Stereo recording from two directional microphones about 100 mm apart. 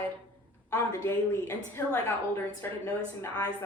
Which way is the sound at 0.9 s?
25° left (ahead or behind).